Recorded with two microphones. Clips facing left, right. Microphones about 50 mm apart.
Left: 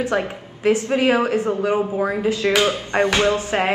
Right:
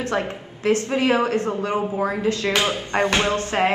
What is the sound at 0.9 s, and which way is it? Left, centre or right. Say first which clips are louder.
A woman's voice: left 2 dB; centre.